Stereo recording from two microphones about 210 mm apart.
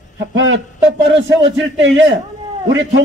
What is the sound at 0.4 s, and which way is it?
A man's voice, 60° right (ahead or behind).